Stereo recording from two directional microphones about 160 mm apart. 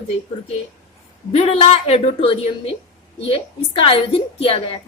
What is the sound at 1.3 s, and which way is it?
A woman's voice, 40° left (ahead or behind).